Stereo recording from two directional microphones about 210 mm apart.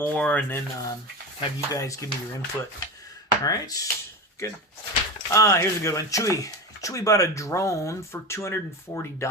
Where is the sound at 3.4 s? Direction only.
20° left (ahead or behind).